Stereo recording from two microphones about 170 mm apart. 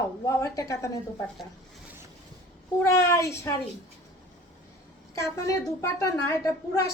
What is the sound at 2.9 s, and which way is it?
Speech, 15° left (ahead or behind).